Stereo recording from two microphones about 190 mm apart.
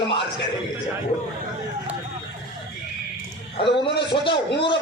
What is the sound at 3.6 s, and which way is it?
A man's voice, 25° left (ahead or behind).